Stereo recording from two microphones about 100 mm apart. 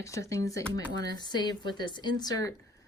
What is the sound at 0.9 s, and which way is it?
Speech, 45° left (ahead or behind).